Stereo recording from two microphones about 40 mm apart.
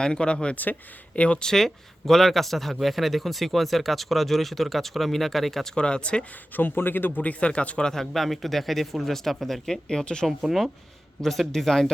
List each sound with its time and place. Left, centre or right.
0.0 s speech: left
0.5 s speech: left
1.1 s speech: left
1.4 s a man's voice: centre
5.7 s speech: left
6.6 s a man's voice: left
7.2 s speech: left
7.8 s a man's voice: centre
8.1 s speech: centre
9.9 s speech: centre
11.2 s a man's voice: centre